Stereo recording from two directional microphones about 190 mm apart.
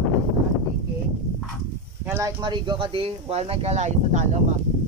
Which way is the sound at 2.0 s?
15° right (ahead or behind).